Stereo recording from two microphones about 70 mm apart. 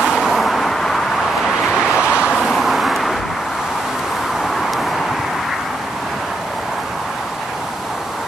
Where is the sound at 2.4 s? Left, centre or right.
Centre.